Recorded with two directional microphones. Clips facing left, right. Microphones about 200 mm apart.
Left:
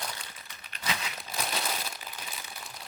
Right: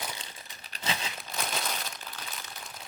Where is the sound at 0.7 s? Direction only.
30° right (ahead or behind).